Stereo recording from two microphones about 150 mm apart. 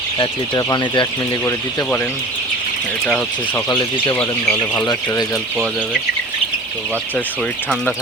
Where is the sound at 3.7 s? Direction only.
30° left (ahead or behind).